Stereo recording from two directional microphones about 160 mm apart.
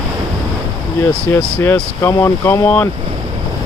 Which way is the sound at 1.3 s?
15° left (ahead or behind).